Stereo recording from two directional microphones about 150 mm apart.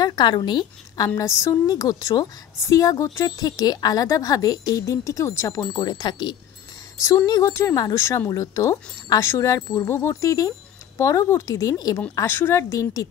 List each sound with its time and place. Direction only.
0.0 s speech: 30° left (ahead or behind)
12.2 s speech: 15° left (ahead or behind)